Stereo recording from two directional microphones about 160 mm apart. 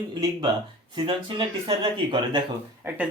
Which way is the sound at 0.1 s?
25° right (ahead or behind).